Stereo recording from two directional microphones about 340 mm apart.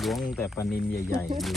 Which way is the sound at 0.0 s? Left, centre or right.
Centre.